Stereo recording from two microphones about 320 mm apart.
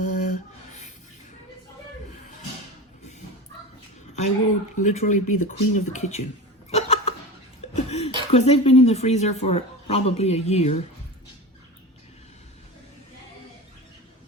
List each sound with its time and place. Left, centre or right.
0.0 s a sound: left
4.8 s speech: left
6.7 s hiccup: centre
7.7 s speech: centre